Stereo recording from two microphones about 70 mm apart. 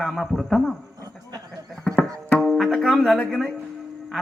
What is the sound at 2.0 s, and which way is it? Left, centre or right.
Tabla, centre.